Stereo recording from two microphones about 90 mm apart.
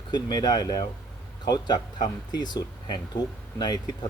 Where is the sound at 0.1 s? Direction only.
50° left (ahead or behind).